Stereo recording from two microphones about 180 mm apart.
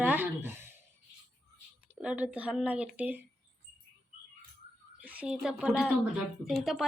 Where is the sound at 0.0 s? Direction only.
10° right (ahead or behind).